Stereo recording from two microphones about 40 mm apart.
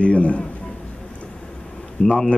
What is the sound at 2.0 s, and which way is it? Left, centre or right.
Speech, left.